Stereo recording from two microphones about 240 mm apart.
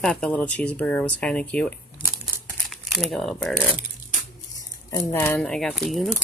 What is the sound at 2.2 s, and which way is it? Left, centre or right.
Crumpling, centre.